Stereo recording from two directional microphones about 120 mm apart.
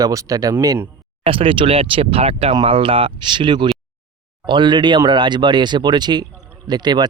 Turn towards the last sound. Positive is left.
turn(degrees=-35)  # may be behind; listen again after turning